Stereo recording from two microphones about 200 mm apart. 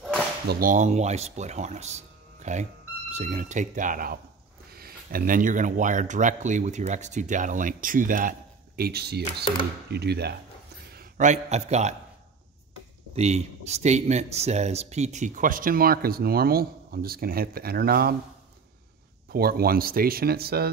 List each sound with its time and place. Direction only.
0.5 s speech: 45° right (ahead or behind)
9.2 s speech: 25° left (ahead or behind)
9.8 s speech: 55° right (ahead or behind)
10.9 s a man's voice: 45° right (ahead or behind)
13.1 s speech: 35° right (ahead or behind); by 18.1 s 50° right (ahead or behind)
19.3 s speech: 50° right (ahead or behind)